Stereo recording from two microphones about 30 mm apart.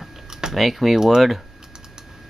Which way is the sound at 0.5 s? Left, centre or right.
Centre.